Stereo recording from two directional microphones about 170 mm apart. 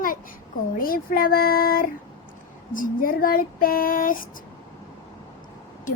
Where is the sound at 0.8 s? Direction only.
55° left (ahead or behind).